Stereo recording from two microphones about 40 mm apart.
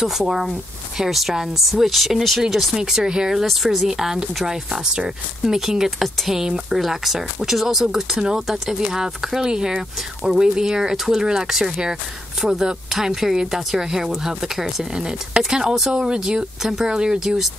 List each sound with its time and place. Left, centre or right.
0.0 s speech: centre
2.5 s speech: centre
3.4 s speech: centre
15.0 s speech: right